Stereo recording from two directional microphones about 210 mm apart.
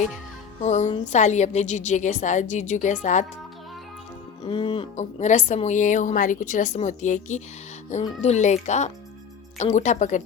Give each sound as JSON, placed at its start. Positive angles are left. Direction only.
{"t": 0.6, "sound": "a woman's voice", "side_deg": 35}
{"t": 4.4, "sound": "a woman's voice", "side_deg": 25}